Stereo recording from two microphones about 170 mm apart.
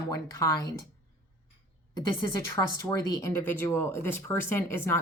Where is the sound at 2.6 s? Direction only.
20° left (ahead or behind).